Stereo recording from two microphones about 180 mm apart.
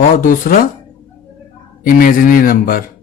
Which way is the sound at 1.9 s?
50° left (ahead or behind).